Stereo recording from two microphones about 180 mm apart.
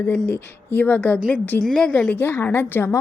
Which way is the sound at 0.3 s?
10° left (ahead or behind).